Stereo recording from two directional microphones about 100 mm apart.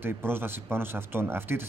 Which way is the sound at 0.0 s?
20° right (ahead or behind).